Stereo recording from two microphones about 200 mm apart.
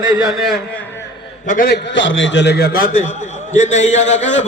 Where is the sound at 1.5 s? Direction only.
45° left (ahead or behind).